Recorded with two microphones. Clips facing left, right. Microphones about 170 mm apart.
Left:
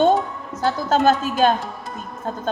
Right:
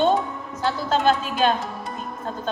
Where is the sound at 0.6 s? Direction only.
45° left (ahead or behind).